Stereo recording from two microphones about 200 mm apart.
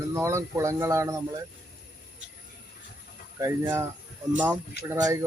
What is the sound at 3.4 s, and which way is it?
Speech, 15° right (ahead or behind).